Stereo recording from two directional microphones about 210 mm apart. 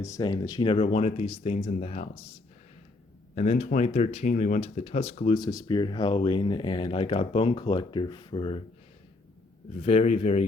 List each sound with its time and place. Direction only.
0.0 s speech: 15° left (ahead or behind)
3.3 s speech: 30° left (ahead or behind)
9.8 s speech: 30° left (ahead or behind)